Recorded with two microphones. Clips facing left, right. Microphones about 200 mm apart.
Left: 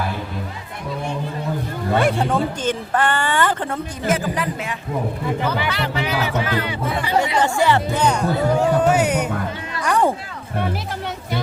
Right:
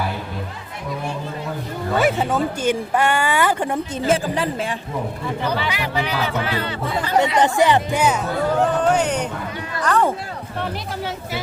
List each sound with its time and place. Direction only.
2.0 s speech: 5° right (ahead or behind)
4.0 s speech: 30° right (ahead or behind)
5.6 s speech: 10° right (ahead or behind)
6.1 s speech: 10° left (ahead or behind)
7.2 s speech: 20° right (ahead or behind)
8.4 s speech: 10° left (ahead or behind)
9.8 s a sound: 15° left (ahead or behind)